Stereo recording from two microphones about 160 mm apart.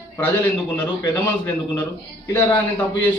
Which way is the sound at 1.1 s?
15° left (ahead or behind).